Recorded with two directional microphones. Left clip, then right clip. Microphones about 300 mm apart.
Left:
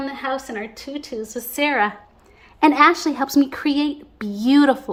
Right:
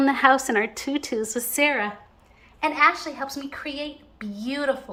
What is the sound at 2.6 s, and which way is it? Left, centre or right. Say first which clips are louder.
A woman's voice: left 6 dB; left.